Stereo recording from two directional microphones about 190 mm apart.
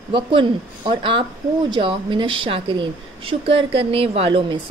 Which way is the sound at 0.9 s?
25° right (ahead or behind).